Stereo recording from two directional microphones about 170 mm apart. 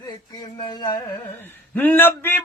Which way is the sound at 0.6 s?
25° left (ahead or behind).